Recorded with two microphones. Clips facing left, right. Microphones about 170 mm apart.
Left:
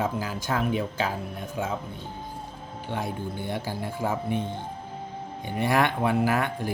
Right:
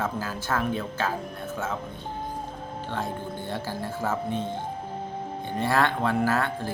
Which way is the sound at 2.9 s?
15° left (ahead or behind).